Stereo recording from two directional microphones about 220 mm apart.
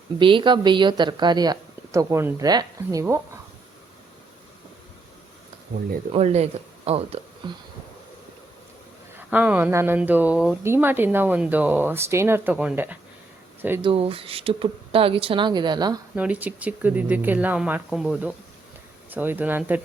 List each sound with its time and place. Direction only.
0.2 s speech: 20° right (ahead or behind)
5.7 s speech: 40° right (ahead or behind)
6.1 s speech: 30° right (ahead or behind)
9.1 s speech: 5° right (ahead or behind)
13.8 s speech: 25° right (ahead or behind)
16.1 s speech: 5° right (ahead or behind)